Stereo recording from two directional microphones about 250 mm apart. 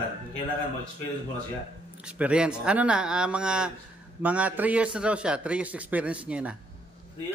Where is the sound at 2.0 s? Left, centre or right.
Centre.